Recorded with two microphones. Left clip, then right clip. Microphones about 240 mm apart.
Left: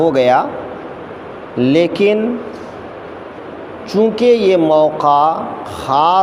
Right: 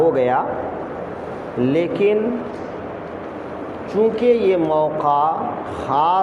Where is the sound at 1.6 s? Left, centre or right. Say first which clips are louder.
Left 5 dB; left.